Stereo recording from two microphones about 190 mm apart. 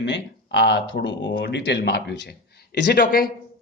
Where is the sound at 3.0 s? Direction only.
50° left (ahead or behind).